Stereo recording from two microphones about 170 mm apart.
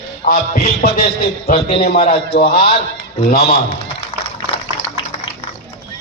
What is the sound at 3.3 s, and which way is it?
Speech, 60° left (ahead or behind).